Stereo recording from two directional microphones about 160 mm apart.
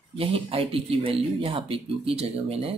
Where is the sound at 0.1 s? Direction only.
35° right (ahead or behind).